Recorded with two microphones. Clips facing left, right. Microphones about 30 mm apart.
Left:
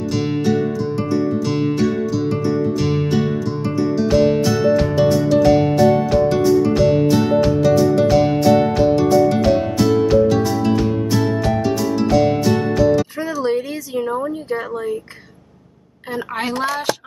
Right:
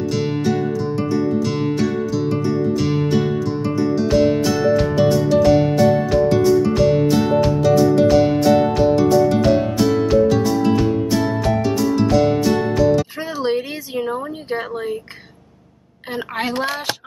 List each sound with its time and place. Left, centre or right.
3.1 s music: centre
13.2 s music: right
13.9 s a sound: right
16.3 s speech: centre
16.6 s a woman's voice: right